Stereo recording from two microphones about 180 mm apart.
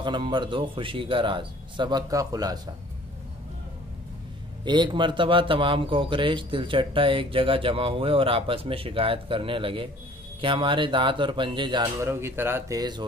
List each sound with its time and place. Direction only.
0.0 s speech: 25° right (ahead or behind)
4.6 s speech: 25° right (ahead or behind)